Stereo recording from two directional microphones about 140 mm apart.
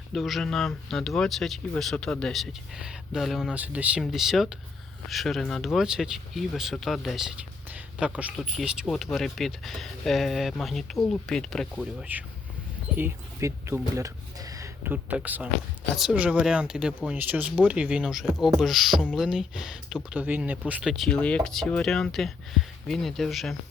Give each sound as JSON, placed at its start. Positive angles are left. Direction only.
{"t": 0.1, "sound": "speech", "side_deg": 0}
{"t": 12.1, "sound": "speech", "side_deg": -10}
{"t": 14.9, "sound": "speech", "side_deg": -10}